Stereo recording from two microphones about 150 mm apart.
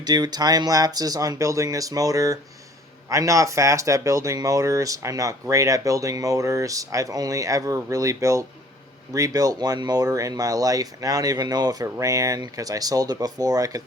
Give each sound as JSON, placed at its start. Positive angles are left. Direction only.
{"t": 0.0, "sound": "speech", "side_deg": -25}